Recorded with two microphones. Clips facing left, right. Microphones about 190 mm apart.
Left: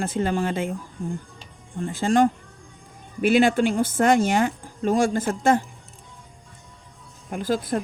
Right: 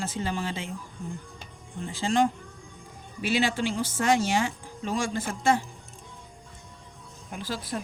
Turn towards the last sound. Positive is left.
turn(degrees=50)  # may be behind; listen again after turning